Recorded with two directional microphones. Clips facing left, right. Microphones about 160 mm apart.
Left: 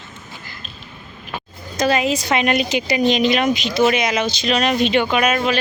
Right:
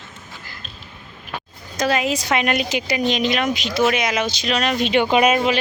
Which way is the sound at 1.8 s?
Centre (ahead or behind).